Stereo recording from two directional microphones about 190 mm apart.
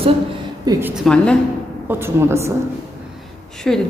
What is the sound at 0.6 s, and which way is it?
Speech, 15° right (ahead or behind).